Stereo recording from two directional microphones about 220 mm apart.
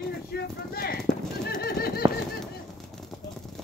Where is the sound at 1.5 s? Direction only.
45° left (ahead or behind).